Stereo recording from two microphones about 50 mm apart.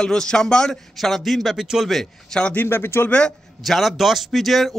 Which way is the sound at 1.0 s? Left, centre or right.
Centre.